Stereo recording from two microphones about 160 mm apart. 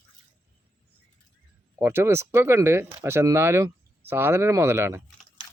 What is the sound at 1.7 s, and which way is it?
Speech, 15° right (ahead or behind).